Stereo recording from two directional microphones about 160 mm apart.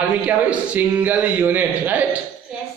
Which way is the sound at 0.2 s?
10° right (ahead or behind).